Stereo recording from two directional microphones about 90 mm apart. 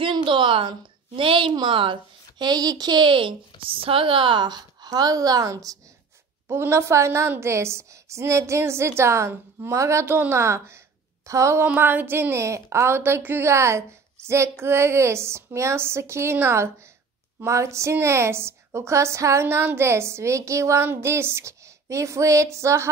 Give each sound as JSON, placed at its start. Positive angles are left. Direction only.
{"t": 0.0, "sound": "a woman's voice", "side_deg": -60}
{"t": 1.5, "sound": "a woman's voice", "side_deg": -60}
{"t": 11.6, "sound": "a woman's voice", "side_deg": -20}